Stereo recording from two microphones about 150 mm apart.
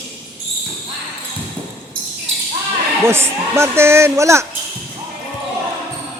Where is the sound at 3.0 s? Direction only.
15° right (ahead or behind).